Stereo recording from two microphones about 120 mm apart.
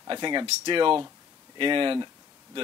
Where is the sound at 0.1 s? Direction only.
40° right (ahead or behind).